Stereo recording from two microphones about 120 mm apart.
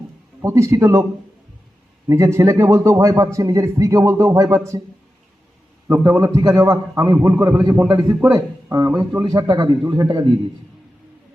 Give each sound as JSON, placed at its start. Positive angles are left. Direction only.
{"t": 0.4, "sound": "speech", "side_deg": -25}
{"t": 2.0, "sound": "speech", "side_deg": -25}
{"t": 5.9, "sound": "a man's voice", "side_deg": -30}